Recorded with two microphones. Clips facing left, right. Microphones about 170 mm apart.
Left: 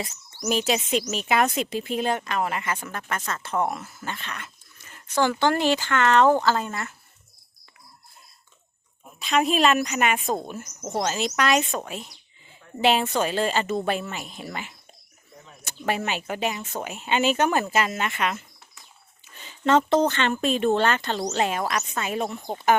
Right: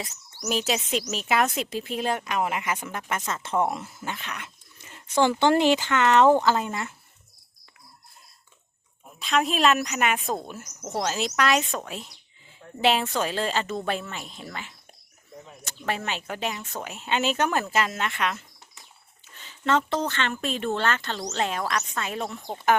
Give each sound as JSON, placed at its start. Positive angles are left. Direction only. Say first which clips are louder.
{"t": 0.4, "sound": "speech", "louder": "left 3 dB", "side_deg": 0}
{"t": 4.0, "sound": "speech", "louder": "even", "side_deg": -10}
{"t": 9.0, "sound": "speech", "louder": "left 2 dB", "side_deg": 0}
{"t": 19.4, "sound": "speech", "louder": "left 4 dB", "side_deg": 15}